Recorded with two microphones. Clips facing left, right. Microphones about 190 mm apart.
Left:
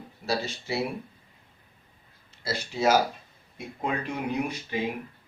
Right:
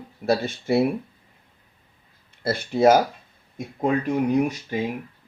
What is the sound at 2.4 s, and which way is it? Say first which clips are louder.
Speech: right 8 dB; 55° right (ahead or behind).